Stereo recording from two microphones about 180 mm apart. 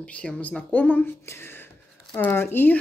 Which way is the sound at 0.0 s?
5° left (ahead or behind).